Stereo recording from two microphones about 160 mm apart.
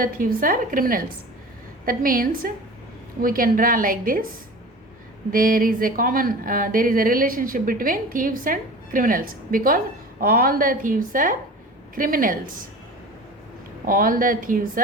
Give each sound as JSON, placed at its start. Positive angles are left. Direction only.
{"t": 0.0, "sound": "speech", "side_deg": -60}
{"t": 5.3, "sound": "speech", "side_deg": -60}
{"t": 13.8, "sound": "speech", "side_deg": -60}